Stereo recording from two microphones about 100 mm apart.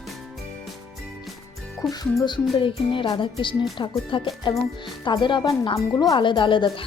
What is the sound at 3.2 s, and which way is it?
Speech, 55° left (ahead or behind).